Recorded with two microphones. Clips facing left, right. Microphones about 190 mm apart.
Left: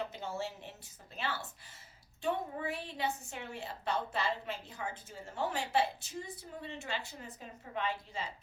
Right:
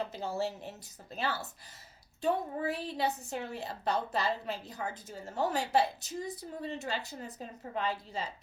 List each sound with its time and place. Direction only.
0.0 s a woman's voice: 35° right (ahead or behind)